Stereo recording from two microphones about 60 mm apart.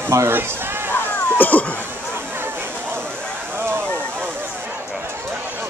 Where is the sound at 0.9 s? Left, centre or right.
Left.